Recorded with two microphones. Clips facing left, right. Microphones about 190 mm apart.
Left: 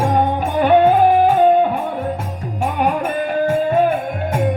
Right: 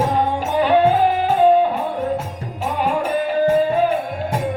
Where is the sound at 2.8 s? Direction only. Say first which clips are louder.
Even; 55° left (ahead or behind).